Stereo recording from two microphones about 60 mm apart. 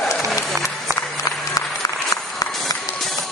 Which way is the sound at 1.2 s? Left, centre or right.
Left.